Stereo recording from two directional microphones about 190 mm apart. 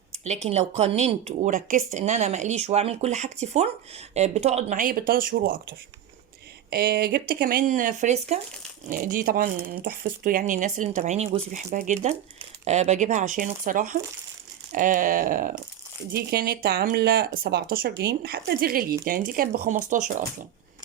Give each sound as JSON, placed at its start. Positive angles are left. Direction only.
{"t": 0.4, "sound": "speech", "side_deg": -35}
{"t": 6.7, "sound": "speech", "side_deg": -55}